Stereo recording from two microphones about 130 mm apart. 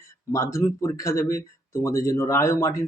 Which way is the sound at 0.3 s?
20° left (ahead or behind).